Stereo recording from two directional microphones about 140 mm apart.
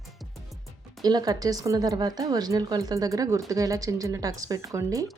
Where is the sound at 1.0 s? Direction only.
30° right (ahead or behind).